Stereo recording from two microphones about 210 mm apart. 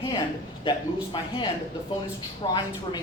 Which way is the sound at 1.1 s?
20° left (ahead or behind).